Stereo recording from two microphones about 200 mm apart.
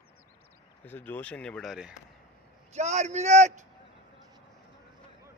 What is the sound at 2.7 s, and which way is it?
Speech, 35° right (ahead or behind).